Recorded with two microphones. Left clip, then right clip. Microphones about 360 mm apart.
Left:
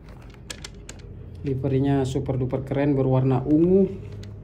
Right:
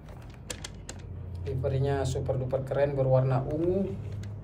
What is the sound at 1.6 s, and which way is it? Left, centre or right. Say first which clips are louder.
Speech: left 5 dB; centre.